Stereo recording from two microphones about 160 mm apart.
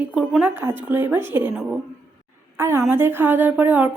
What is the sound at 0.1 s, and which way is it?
A woman's voice, 5° right (ahead or behind).